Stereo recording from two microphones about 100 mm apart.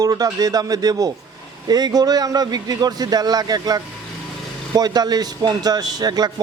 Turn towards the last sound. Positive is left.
turn(degrees=-40)  # may be behind; listen again after turning